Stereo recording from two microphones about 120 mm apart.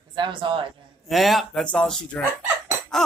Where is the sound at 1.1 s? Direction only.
Centre (ahead or behind).